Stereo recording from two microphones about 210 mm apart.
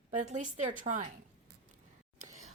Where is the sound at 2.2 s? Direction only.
35° right (ahead or behind).